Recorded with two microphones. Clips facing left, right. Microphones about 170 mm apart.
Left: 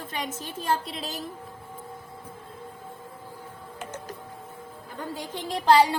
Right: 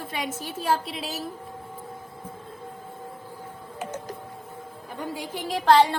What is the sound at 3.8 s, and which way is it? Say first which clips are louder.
Tick-tock: right 4 dB; 15° right (ahead or behind).